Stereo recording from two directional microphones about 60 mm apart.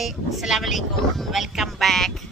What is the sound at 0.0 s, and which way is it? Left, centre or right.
Speech, centre.